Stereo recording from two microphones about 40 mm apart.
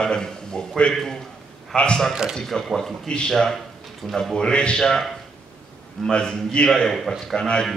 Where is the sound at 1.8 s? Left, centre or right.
Left.